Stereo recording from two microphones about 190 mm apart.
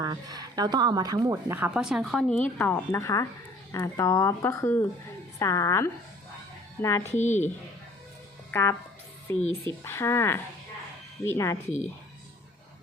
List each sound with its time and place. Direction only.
0.0 s speech: 20° right (ahead or behind); by 7.1 s 15° left (ahead or behind)
7.1 s speech: 40° left (ahead or behind)
8.4 s speech: 10° left (ahead or behind)